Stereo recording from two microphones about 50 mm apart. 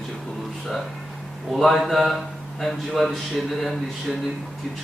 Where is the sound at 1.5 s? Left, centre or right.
Centre.